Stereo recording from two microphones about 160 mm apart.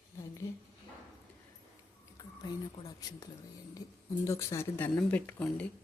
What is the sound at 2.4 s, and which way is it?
Speech, 20° left (ahead or behind).